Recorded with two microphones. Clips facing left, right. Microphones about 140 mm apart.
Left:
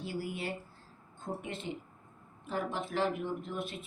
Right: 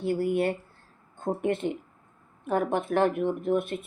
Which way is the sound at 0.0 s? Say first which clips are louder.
Right 12 dB; 60° right (ahead or behind).